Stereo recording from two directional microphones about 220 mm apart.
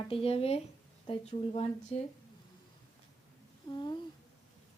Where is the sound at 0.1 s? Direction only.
25° left (ahead or behind).